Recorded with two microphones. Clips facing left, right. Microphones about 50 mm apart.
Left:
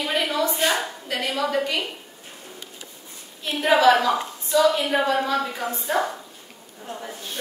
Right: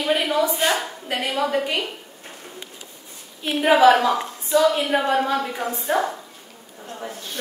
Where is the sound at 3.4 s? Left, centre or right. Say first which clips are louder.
Right 3 dB; centre.